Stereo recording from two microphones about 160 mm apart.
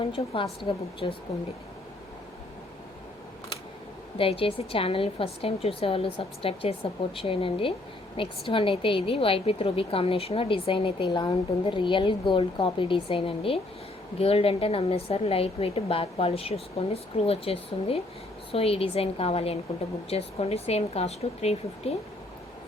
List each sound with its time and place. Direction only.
0.0 s a woman's voice: 35° left (ahead or behind)
4.2 s a woman's voice: 35° left (ahead or behind)